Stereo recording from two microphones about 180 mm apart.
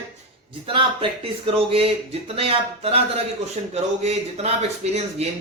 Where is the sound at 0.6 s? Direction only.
30° right (ahead or behind).